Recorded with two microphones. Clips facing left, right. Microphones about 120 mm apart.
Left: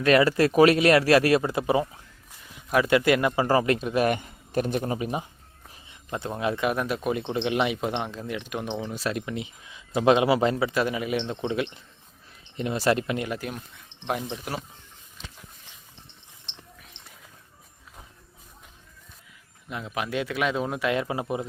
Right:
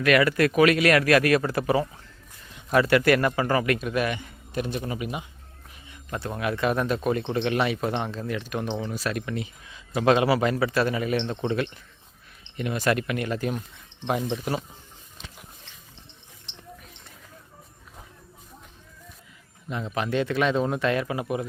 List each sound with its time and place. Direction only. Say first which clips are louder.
0.0 s speech: left 1 dB; 30° left (ahead or behind)
1.4 s speech: even; 20° left (ahead or behind)
2.5 s a sound: right 2 dB; 5° left (ahead or behind)
2.8 s speech: even; 20° left (ahead or behind)
3.3 s speech: left 2 dB; 30° left (ahead or behind)
4.1 s a man's voice: left 5 dB; 45° left (ahead or behind)
4.8 s speech: left 3 dB; 30° left (ahead or behind)
5.9 s speech: even; 20° left (ahead or behind)
6.6 s speech: right 2 dB; 10° left (ahead or behind)
12.5 s speech: left 1 dB; 30° left (ahead or behind)
13.2 s speech: right 4 dB; 10° left (ahead or behind)
19.6 s speech: right 3 dB; 5° left (ahead or behind); by 21.4 s 25° left (ahead or behind)